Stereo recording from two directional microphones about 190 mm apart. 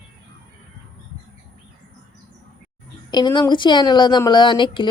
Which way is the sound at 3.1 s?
25° left (ahead or behind).